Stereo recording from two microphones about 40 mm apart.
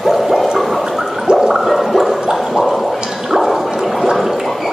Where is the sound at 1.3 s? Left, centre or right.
Centre.